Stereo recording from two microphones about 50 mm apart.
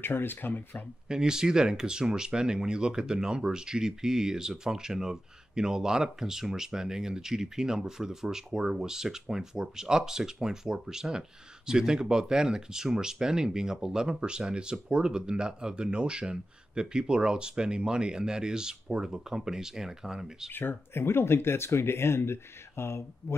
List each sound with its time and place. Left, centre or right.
0.0 s speech: left
1.0 s speech: centre
20.5 s speech: left